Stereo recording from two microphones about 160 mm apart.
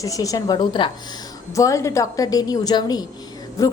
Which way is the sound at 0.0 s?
20° left (ahead or behind).